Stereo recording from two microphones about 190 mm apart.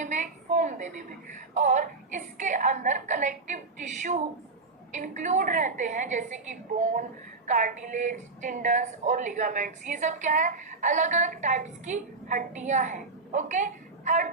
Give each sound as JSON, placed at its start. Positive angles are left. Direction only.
{"t": 0.0, "sound": "a woman's voice", "side_deg": -40}